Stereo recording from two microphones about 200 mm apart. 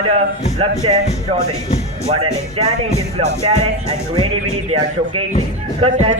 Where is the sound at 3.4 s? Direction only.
30° right (ahead or behind).